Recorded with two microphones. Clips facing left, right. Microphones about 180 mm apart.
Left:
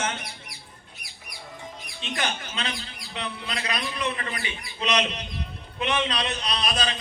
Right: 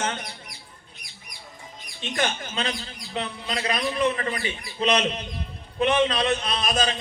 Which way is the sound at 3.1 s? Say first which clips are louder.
Right 3 dB; 35° right (ahead or behind).